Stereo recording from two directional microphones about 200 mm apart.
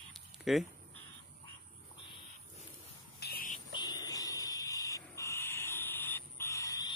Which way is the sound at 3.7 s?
20° left (ahead or behind).